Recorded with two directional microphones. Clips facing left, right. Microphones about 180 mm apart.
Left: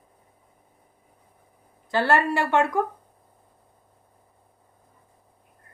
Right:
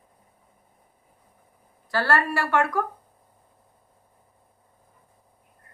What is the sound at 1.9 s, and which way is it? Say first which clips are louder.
A woman's voice: left 2 dB; 20° left (ahead or behind).